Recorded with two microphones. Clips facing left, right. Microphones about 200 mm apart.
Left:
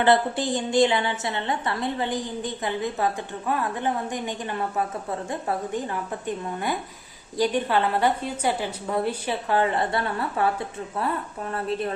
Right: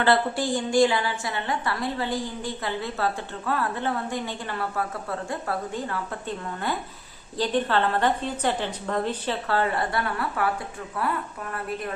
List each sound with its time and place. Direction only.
0.0 s a woman's voice: 20° left (ahead or behind)